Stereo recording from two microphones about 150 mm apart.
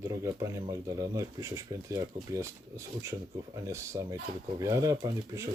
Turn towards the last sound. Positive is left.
turn(degrees=-20)  # may be behind; listen again after turning